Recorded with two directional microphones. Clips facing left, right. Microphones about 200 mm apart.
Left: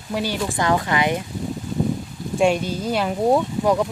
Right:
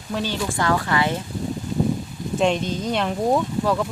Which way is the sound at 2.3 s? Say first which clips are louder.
Left 2 dB; 10° left (ahead or behind).